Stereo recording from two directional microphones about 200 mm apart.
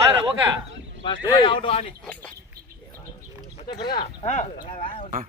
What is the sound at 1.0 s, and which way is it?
Speech, 25° left (ahead or behind).